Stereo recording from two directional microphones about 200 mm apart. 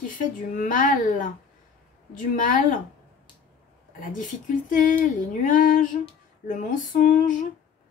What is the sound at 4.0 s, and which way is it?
Speech, 40° left (ahead or behind).